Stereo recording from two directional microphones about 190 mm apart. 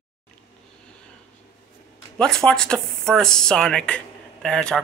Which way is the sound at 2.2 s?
5° left (ahead or behind).